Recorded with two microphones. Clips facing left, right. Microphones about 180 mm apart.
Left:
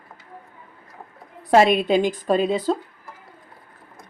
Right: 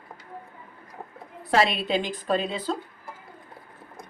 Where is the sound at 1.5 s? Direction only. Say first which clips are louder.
Left 7 dB; 45° left (ahead or behind).